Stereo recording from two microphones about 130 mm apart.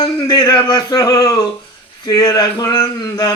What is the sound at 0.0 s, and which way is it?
Speech, 30° left (ahead or behind).